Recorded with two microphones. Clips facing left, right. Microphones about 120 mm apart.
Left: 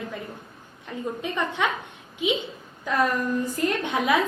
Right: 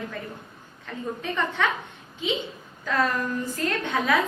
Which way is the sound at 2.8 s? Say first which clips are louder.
Left 1 dB; 15° left (ahead or behind).